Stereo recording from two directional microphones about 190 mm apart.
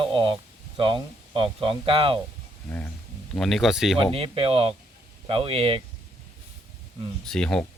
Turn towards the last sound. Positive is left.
turn(degrees=5)  # may be behind; listen again after turning